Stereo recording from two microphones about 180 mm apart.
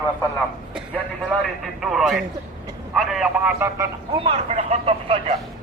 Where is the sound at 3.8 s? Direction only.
15° right (ahead or behind).